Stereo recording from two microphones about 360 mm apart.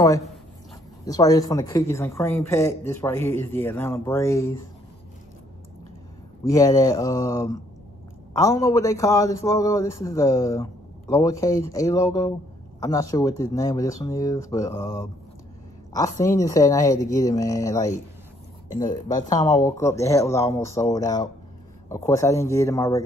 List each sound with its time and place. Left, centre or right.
0.0 s a woman's voice: centre
6.5 s a man's voice: centre